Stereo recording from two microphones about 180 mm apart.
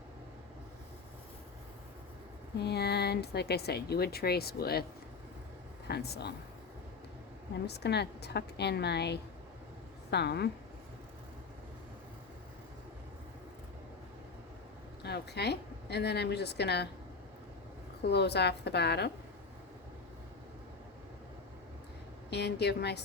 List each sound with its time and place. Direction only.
2.6 s speech: 65° left (ahead or behind)
5.9 s speech: 65° left (ahead or behind)
7.7 s a woman's voice: 65° left (ahead or behind)
15.0 s a woman's voice: 65° left (ahead or behind)
18.1 s a woman's voice: 65° left (ahead or behind)
22.3 s a woman's voice: 70° left (ahead or behind)